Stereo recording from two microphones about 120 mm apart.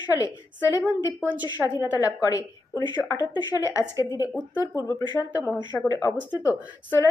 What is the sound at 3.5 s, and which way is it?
A woman's voice, 25° left (ahead or behind).